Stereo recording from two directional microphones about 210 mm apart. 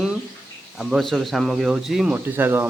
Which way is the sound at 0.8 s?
Centre (ahead or behind).